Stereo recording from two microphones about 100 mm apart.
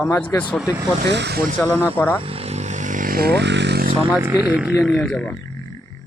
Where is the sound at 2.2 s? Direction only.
75° right (ahead or behind).